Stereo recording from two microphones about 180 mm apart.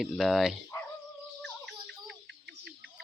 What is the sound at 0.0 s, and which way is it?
Speech, centre (ahead or behind).